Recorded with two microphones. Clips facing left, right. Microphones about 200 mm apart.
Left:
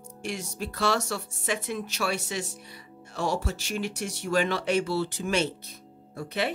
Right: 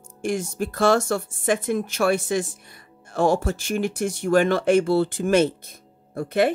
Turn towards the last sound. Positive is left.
turn(degrees=-50)  # may be behind; listen again after turning